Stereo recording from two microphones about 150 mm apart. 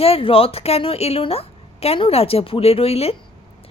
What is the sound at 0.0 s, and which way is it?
Speech, 40° left (ahead or behind).